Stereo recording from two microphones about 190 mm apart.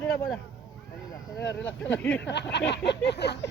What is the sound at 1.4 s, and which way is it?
Speech, 70° left (ahead or behind).